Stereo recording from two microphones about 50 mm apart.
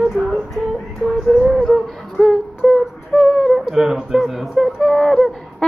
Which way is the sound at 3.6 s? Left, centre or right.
Centre.